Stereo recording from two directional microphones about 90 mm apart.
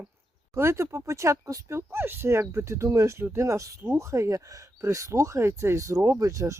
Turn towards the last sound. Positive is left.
turn(degrees=-35)  # may be behind; listen again after turning